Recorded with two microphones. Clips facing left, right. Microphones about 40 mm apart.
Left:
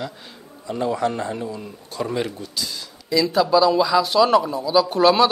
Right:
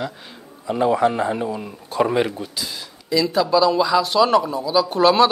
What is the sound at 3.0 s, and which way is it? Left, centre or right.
A man's voice, centre.